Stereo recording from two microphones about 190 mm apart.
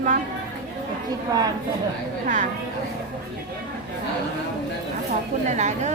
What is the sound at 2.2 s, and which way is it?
Speech, 40° right (ahead or behind).